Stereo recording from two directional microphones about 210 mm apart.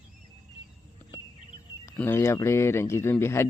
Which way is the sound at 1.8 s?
10° left (ahead or behind).